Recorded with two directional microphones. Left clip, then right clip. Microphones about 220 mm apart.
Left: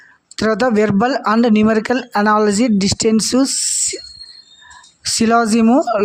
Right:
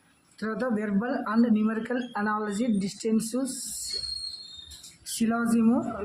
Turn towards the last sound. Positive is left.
turn(degrees=40)  # may be behind; listen again after turning